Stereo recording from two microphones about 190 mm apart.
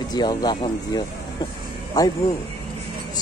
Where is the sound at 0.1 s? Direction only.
20° left (ahead or behind).